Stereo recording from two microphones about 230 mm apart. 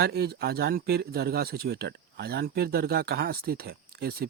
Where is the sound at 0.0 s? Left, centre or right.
Right.